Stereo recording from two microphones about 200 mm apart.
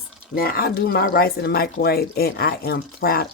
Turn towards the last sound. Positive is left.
turn(degrees=50)  # may be behind; listen again after turning